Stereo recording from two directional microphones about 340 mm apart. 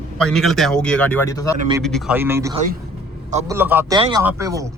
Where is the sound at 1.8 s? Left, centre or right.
Centre.